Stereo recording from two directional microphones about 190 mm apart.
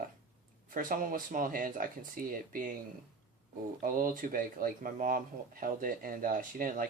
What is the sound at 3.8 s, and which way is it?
Speech, 45° right (ahead or behind).